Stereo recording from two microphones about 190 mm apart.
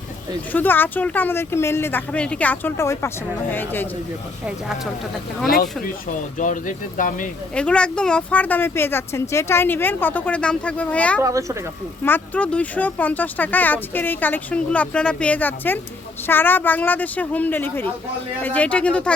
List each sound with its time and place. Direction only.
0.5 s speech: 10° left (ahead or behind)
5.8 s speech: 45° left (ahead or behind)
7.5 s speech: 5° left (ahead or behind)
11.2 s speech: 15° right (ahead or behind)
12.0 s speech: 10° left (ahead or behind)